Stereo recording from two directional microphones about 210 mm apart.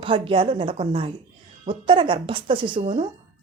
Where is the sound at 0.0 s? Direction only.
25° right (ahead or behind).